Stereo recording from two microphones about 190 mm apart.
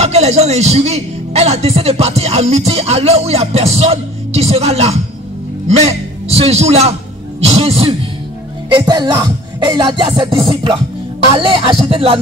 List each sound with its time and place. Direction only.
0.0 s a man's voice: 35° right (ahead or behind)
8.7 s music: 20° right (ahead or behind)